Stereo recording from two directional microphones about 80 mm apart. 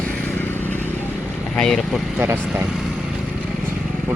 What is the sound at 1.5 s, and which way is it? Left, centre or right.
Speech, centre.